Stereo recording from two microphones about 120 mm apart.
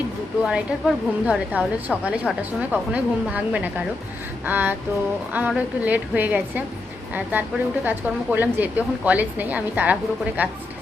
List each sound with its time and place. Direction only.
0.4 s a woman's voice: 5° right (ahead or behind)